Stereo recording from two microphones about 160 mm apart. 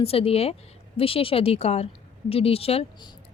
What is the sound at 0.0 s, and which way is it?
A woman's voice, 40° left (ahead or behind).